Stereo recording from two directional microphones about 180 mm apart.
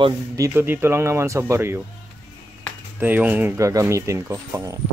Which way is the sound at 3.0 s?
10° right (ahead or behind).